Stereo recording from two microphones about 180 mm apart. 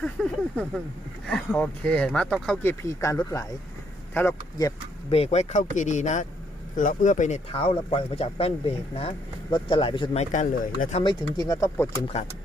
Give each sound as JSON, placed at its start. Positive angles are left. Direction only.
{"t": 0.0, "sound": "speech", "side_deg": 5}
{"t": 2.8, "sound": "speech", "side_deg": 15}
{"t": 5.1, "sound": "speech", "side_deg": 35}
{"t": 10.3, "sound": "speech", "side_deg": 45}
{"t": 11.0, "sound": "speech", "side_deg": 25}